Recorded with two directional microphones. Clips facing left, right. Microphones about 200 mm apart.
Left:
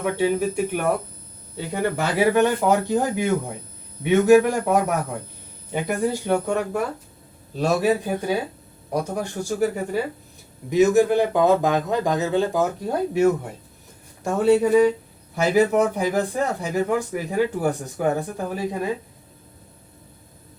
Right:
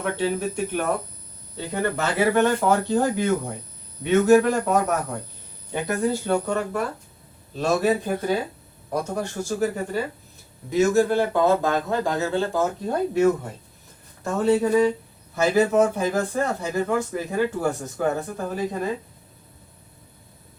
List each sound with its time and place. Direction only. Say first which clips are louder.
0.0 s speech: left 3 dB; 10° left (ahead or behind)